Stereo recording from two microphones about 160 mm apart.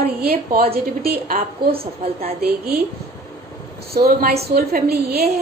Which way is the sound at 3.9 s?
75° right (ahead or behind).